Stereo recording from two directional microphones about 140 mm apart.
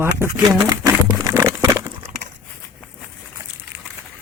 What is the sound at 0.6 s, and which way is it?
Crumpling, 25° right (ahead or behind).